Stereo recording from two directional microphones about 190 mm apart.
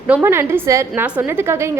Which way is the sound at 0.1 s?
15° right (ahead or behind).